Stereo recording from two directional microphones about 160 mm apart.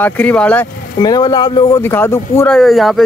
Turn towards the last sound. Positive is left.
turn(degrees=0)  # may be behind; listen again after turning